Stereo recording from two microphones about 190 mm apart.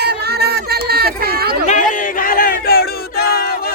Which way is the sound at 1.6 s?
45° left (ahead or behind).